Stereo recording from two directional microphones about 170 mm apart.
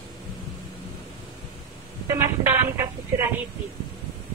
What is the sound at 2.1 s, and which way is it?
A woman's voice, 15° right (ahead or behind).